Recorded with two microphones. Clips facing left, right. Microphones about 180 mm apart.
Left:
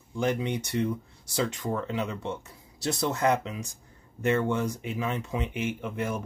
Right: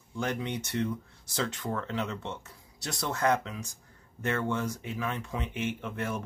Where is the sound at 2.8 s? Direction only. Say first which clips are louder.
Left 4 dB; 25° left (ahead or behind).